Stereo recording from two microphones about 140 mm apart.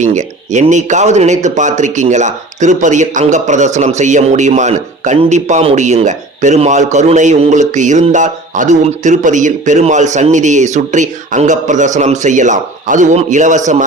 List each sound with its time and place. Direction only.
0.0 s speech: 55° right (ahead or behind)